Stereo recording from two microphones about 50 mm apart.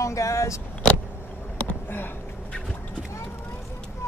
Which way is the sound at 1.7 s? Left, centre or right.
Left.